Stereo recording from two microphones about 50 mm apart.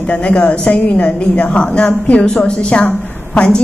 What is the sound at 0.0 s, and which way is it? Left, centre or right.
Speech, left.